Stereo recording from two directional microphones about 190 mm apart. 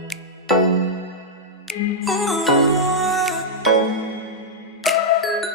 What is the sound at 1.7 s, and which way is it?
Music, centre (ahead or behind).